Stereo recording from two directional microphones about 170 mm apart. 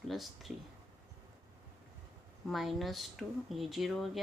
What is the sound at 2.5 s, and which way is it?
Speech, centre (ahead or behind).